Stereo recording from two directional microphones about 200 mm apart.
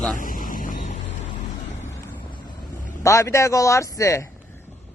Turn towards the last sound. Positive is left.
turn(degrees=15)  # may be behind; listen again after turning